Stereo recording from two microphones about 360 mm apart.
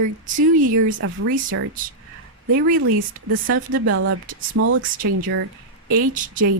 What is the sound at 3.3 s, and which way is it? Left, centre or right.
Speech, right.